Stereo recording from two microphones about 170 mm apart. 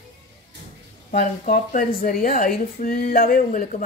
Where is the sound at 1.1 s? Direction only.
55° left (ahead or behind).